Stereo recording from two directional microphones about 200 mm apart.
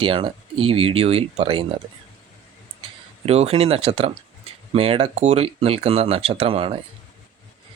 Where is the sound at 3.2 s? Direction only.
30° right (ahead or behind).